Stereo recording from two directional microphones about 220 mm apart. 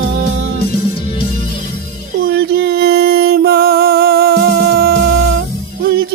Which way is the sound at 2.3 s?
45° right (ahead or behind).